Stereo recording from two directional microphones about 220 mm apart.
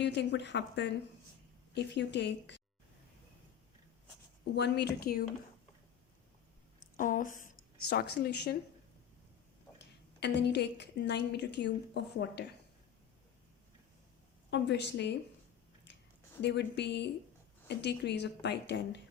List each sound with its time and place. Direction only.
0.0 s speech: 55° left (ahead or behind)
4.5 s speech: 50° left (ahead or behind)
6.9 s a woman's voice: 35° left (ahead or behind)
9.7 s a woman's voice: 50° left (ahead or behind)
14.5 s speech: 50° left (ahead or behind)
16.4 s speech: 50° left (ahead or behind)